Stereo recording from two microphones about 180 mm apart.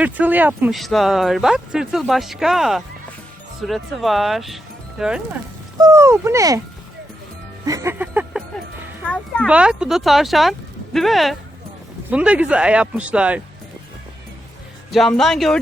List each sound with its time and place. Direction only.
0.0 s speech: 10° right (ahead or behind)
5.8 s speech: 15° right (ahead or behind)
7.6 s music: 20° right (ahead or behind)
9.0 s speech: 5° left (ahead or behind)
9.5 s speech: 5° right (ahead or behind)
14.8 s speech: centre (ahead or behind)